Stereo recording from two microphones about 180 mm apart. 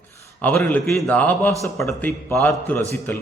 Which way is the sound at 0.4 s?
5° left (ahead or behind).